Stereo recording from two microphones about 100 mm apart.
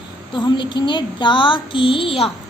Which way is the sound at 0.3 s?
50° left (ahead or behind).